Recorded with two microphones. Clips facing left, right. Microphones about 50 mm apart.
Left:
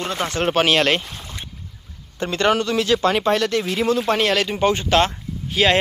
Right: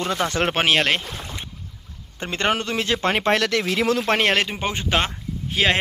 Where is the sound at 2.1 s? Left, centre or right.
Right.